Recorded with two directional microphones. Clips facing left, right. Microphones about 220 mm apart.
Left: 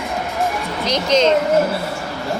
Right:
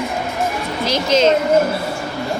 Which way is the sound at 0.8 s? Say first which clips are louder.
Right 1 dB; 5° right (ahead or behind).